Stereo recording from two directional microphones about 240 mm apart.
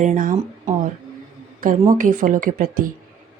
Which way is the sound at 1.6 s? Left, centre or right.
Right.